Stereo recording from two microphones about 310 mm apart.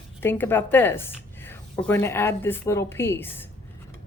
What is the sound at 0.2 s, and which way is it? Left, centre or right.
Speech, centre.